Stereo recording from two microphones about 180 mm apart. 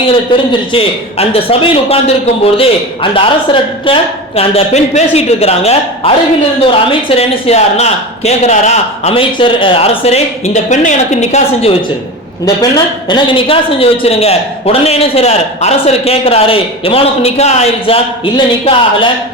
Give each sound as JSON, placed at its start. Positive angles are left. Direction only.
{"t": 0.7, "sound": "speech", "side_deg": 30}
{"t": 12.5, "sound": "speech", "side_deg": 25}